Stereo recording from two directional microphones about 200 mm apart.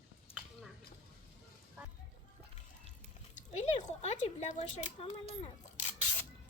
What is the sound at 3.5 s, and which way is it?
Speech, 35° left (ahead or behind).